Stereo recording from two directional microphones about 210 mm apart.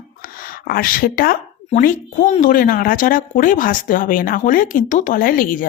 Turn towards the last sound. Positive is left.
turn(degrees=40)  # may be behind; listen again after turning